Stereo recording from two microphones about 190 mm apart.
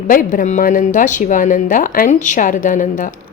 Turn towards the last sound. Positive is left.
turn(degrees=45)  # may be behind; listen again after turning